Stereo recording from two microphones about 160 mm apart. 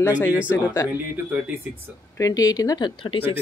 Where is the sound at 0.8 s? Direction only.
10° right (ahead or behind).